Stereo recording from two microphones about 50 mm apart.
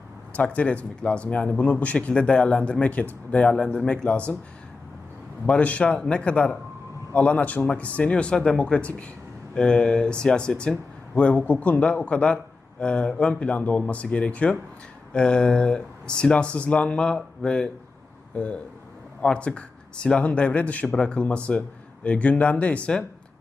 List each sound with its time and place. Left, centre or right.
0.3 s speech: left
5.5 s speech: left